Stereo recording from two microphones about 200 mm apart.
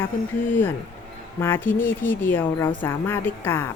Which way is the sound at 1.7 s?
45° left (ahead or behind).